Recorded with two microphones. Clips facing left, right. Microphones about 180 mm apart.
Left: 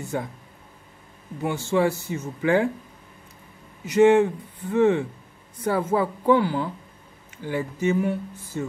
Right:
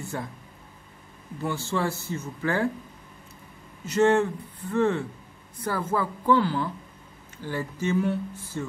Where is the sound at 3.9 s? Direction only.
10° left (ahead or behind).